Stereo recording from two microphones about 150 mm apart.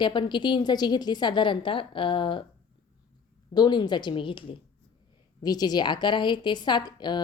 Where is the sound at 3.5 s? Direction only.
30° left (ahead or behind).